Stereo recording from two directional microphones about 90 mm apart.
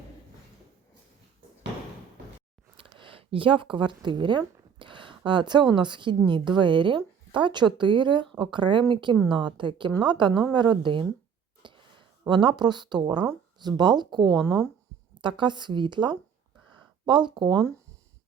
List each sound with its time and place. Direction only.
2.7 s speech: 75° right (ahead or behind)
11.6 s a sound: 70° right (ahead or behind)
12.3 s speech: 60° right (ahead or behind)
14.3 s speech: 10° left (ahead or behind)
15.2 s speech: 60° right (ahead or behind)